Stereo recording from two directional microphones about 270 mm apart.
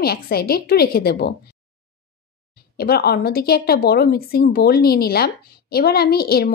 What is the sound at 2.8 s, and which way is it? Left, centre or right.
A woman's voice, left.